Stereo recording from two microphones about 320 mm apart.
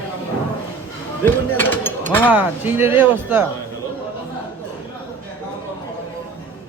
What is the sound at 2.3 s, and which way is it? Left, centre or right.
Speech, centre.